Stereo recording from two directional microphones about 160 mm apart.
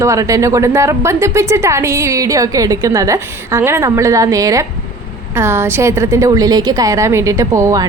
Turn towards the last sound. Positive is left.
turn(degrees=-20)  # may be behind; listen again after turning